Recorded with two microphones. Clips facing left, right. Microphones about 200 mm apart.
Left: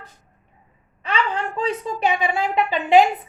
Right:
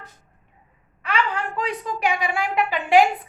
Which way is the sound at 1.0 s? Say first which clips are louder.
Left 1 dB; 25° left (ahead or behind).